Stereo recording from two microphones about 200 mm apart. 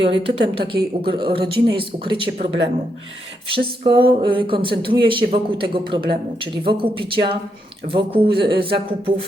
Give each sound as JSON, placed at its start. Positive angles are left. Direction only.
{"t": 0.0, "sound": "speech", "side_deg": -25}
{"t": 3.8, "sound": "speech", "side_deg": -25}